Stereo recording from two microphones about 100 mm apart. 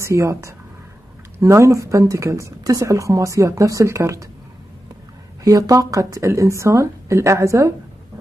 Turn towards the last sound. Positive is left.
turn(degrees=-30)  # may be behind; listen again after turning